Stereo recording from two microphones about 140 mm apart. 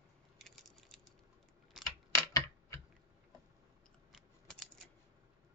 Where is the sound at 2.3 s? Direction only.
20° left (ahead or behind).